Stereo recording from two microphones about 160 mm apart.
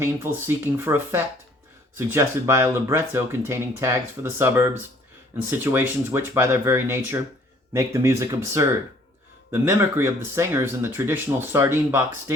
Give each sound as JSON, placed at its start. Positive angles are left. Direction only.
{"t": 0.0, "sound": "speech", "side_deg": -15}